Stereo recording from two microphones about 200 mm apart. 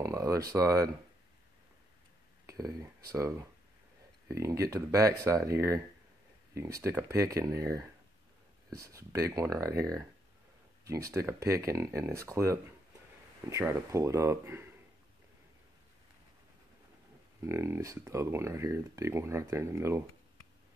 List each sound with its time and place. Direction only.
0.0 s speech: 15° right (ahead or behind)
2.4 s speech: 15° right (ahead or behind)
6.8 s speech: 15° right (ahead or behind)
10.9 s speech: 15° right (ahead or behind)
17.4 s speech: 15° right (ahead or behind)